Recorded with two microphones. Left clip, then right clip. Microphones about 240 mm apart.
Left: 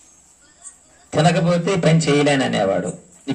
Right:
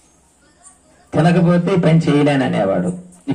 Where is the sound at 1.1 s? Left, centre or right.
Left.